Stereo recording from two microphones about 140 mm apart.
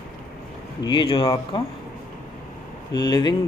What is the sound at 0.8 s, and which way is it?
Speech, 35° left (ahead or behind).